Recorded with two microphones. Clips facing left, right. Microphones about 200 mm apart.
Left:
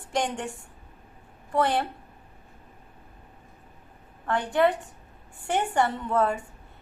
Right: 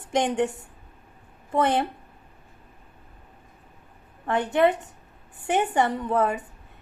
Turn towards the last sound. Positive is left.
turn(degrees=-20)  # may be behind; listen again after turning